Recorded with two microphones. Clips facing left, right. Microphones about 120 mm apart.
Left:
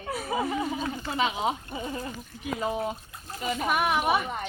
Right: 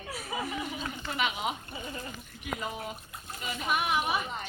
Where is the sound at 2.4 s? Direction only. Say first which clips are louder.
Left 7 dB; 35° left (ahead or behind).